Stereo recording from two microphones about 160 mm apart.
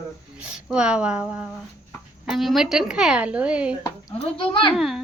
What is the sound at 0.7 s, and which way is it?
A woman's voice, 5° right (ahead or behind).